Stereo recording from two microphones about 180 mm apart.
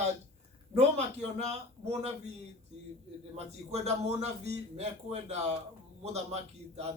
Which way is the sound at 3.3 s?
35° right (ahead or behind).